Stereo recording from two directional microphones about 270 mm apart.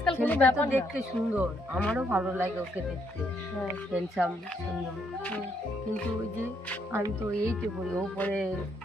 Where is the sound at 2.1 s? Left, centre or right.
Centre.